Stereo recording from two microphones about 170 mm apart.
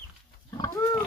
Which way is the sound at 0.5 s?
20° left (ahead or behind).